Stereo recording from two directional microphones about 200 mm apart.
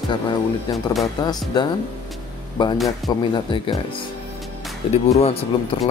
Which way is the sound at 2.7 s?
Centre (ahead or behind).